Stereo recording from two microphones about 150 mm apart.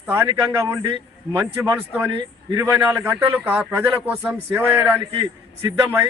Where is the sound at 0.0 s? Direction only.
15° right (ahead or behind).